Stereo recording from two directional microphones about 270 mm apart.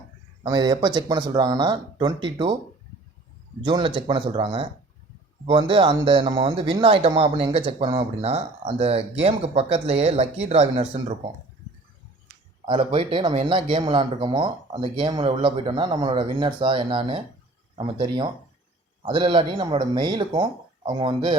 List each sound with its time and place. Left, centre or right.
0.4 s speech: centre
3.6 s speech: centre
12.6 s speech: centre